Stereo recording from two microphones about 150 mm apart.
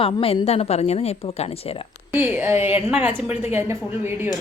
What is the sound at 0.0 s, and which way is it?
A woman's voice, 40° left (ahead or behind).